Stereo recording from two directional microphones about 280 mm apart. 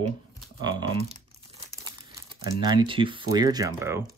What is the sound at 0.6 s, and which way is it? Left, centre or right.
Crumpling, centre.